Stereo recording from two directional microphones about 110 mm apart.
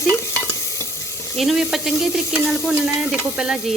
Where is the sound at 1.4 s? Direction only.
Centre (ahead or behind).